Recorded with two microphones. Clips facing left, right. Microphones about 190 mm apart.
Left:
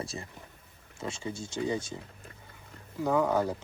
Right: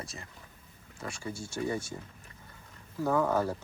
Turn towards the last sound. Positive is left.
turn(degrees=15)  # may be behind; listen again after turning